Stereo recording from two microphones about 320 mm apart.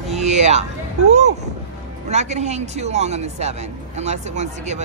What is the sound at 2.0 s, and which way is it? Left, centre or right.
Speech, right.